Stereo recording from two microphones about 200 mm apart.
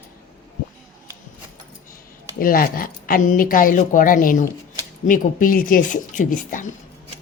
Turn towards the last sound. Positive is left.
turn(degrees=40)  # may be behind; listen again after turning